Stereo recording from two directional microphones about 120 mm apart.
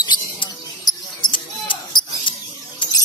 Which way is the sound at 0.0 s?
35° left (ahead or behind).